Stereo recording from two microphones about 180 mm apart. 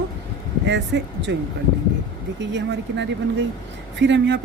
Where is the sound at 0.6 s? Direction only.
90° right.